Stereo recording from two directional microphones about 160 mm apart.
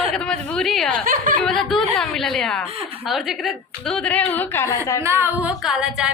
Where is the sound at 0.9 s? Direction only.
60° right (ahead or behind).